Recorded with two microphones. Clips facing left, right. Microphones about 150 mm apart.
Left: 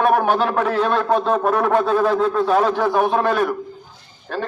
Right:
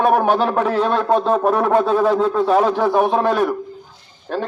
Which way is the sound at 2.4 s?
5° right (ahead or behind).